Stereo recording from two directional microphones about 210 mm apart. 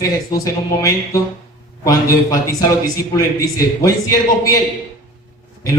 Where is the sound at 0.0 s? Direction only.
15° left (ahead or behind).